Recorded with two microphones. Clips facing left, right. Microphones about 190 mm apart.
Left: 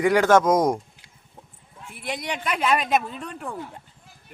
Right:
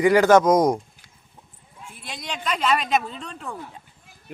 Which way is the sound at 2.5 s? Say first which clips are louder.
Even; 5° left (ahead or behind).